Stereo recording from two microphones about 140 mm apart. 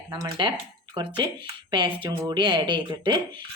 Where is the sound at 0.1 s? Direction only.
30° right (ahead or behind).